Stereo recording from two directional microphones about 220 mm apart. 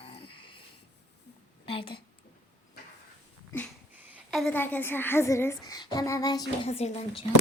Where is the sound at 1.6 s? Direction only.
25° left (ahead or behind).